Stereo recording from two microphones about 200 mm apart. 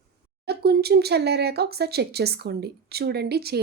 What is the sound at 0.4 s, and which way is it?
Speech, 50° right (ahead or behind).